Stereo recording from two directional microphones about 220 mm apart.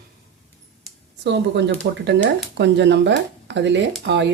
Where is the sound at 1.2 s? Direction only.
50° right (ahead or behind).